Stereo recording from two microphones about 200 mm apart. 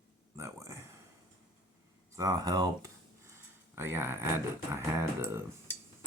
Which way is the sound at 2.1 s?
20° right (ahead or behind).